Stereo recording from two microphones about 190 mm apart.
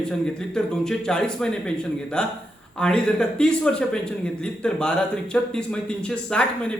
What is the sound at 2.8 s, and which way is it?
A man's voice, 5° left (ahead or behind).